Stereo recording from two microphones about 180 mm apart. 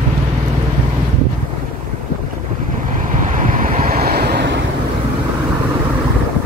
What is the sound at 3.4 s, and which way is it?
Waves, 45° right (ahead or behind).